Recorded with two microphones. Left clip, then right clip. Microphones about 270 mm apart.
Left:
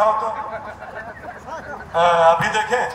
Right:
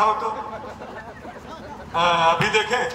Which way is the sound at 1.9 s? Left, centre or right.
Centre.